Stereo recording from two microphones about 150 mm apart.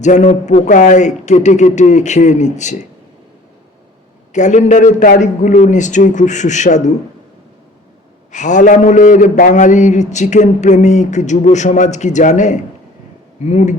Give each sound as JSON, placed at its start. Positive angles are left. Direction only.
{"t": 0.0, "sound": "a man's voice", "side_deg": 50}
{"t": 4.3, "sound": "a man's voice", "side_deg": 55}
{"t": 8.3, "sound": "a man's voice", "side_deg": 55}